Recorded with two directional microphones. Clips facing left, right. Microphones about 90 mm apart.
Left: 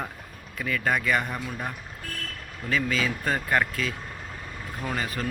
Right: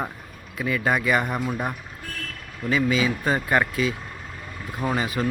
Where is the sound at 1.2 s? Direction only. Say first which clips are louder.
Right 6 dB; 20° right (ahead or behind).